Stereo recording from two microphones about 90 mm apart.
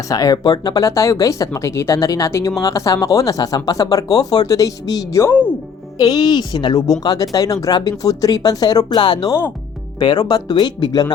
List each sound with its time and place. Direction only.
0.1 s speech: 45° left (ahead or behind)
5.3 s music: 15° left (ahead or behind)
6.0 s speech: 45° left (ahead or behind)